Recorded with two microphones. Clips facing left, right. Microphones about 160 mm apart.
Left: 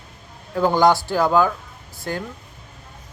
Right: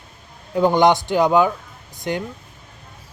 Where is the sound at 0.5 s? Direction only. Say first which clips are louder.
Right 2 dB; 20° right (ahead or behind).